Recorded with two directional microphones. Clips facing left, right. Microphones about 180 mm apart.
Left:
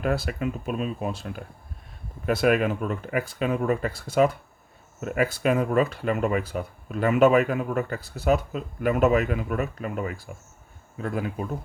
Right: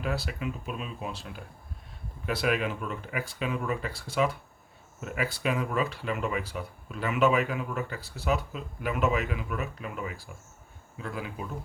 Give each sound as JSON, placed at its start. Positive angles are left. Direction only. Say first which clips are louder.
{"t": 0.0, "sound": "speech", "louder": "left 6 dB", "side_deg": 50}